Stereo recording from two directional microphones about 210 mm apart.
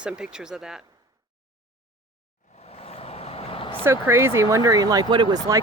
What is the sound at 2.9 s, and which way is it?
Vehicle, 30° left (ahead or behind).